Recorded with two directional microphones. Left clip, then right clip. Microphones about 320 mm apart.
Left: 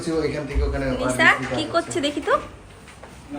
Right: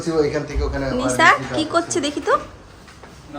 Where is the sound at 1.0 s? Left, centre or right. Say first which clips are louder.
Right 3 dB; centre.